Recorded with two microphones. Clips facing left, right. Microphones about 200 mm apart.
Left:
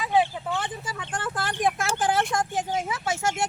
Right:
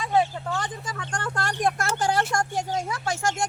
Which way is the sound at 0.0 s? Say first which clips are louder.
Even; centre (ahead or behind).